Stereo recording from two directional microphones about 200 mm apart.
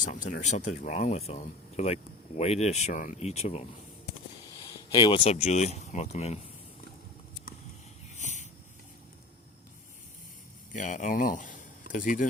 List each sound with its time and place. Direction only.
0.0 s speech: 40° left (ahead or behind)
4.5 s speech: 20° left (ahead or behind)
8.1 s wheeze: 35° left (ahead or behind)
10.7 s speech: 40° left (ahead or behind)